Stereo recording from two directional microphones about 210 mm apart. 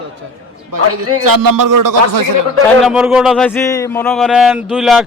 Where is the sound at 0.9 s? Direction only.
90° right.